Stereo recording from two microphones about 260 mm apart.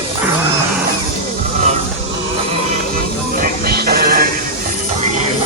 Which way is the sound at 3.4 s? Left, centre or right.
Right.